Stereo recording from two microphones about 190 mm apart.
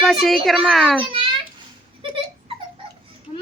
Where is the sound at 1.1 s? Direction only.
25° right (ahead or behind).